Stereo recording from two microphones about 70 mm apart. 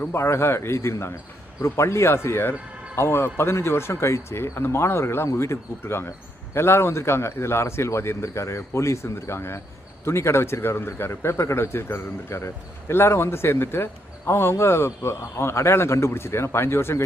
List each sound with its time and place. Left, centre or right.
0.1 s speech: left